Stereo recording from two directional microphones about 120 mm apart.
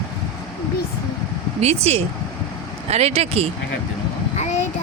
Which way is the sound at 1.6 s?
60° right (ahead or behind).